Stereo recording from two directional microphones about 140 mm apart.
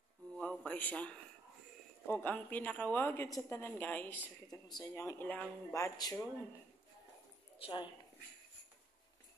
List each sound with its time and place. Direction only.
0.4 s a man's voice: 10° left (ahead or behind)
4.5 s speech: 30° left (ahead or behind); by 5.8 s 10° left (ahead or behind)
5.8 s speech: 25° left (ahead or behind)
7.5 s speech: 35° left (ahead or behind)